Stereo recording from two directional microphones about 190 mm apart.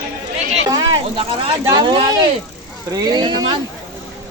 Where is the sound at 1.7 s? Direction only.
25° right (ahead or behind).